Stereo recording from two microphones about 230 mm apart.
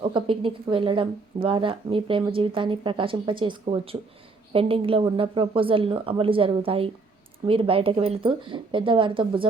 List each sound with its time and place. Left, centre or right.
0.0 s speech: right